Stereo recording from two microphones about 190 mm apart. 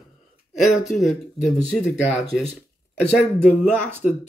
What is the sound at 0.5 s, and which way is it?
Speech, centre (ahead or behind).